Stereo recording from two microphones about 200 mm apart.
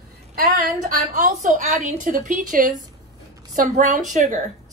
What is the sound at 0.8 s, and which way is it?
A woman's voice, 40° right (ahead or behind).